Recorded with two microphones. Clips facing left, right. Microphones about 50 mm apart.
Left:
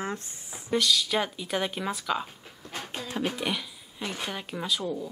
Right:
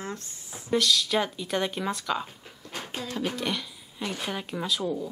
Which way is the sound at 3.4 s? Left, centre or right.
Centre.